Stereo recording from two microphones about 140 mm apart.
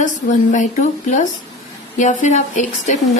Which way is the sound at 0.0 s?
65° left (ahead or behind).